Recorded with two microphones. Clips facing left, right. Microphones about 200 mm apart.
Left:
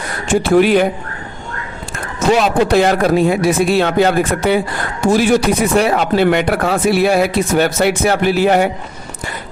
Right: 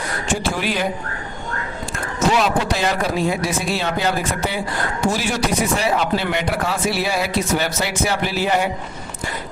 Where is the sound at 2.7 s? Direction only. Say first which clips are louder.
Left 9 dB; 60° left (ahead or behind).